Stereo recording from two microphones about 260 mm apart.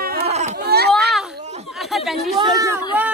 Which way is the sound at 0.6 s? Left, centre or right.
Right.